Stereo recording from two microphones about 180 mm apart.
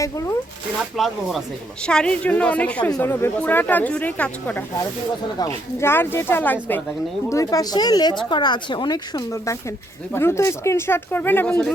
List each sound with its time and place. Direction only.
0.0 s speech: 15° left (ahead or behind)
0.8 s speech: centre (ahead or behind)